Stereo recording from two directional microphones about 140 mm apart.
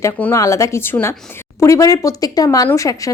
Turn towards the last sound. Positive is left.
turn(degrees=25)  # may be behind; listen again after turning